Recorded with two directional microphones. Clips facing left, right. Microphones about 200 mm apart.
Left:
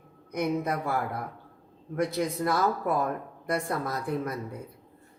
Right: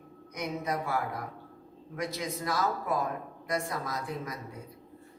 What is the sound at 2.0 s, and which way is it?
A woman's voice, 55° left (ahead or behind).